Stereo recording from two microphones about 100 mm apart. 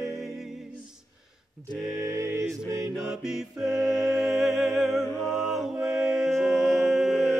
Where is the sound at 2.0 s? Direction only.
30° right (ahead or behind).